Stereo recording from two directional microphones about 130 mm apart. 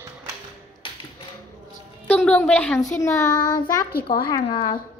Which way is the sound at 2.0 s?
10° left (ahead or behind).